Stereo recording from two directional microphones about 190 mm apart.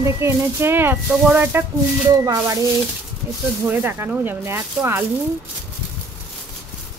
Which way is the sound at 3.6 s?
10° right (ahead or behind).